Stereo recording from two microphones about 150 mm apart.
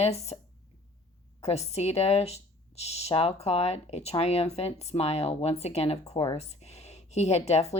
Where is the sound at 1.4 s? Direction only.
45° left (ahead or behind).